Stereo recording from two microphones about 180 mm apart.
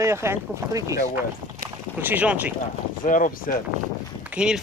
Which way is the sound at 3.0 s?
45° left (ahead or behind).